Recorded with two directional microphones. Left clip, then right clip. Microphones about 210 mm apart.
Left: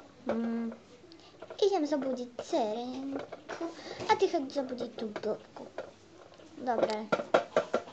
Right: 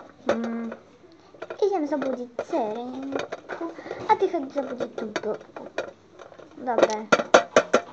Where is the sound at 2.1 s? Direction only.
25° right (ahead or behind).